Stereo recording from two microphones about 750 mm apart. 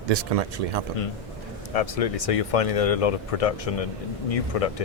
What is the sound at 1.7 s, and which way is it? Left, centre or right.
Speech, left.